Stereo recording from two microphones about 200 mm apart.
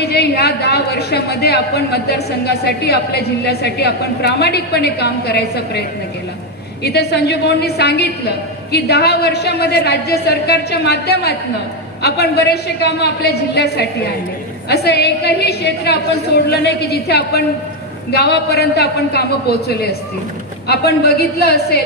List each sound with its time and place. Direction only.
0.0 s a woman's voice: 55° left (ahead or behind)